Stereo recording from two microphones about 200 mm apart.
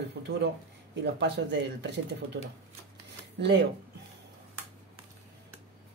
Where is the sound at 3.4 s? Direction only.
60° right (ahead or behind).